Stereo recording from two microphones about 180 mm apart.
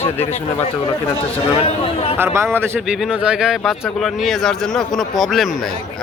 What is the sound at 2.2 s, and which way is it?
A man's voice, 15° right (ahead or behind).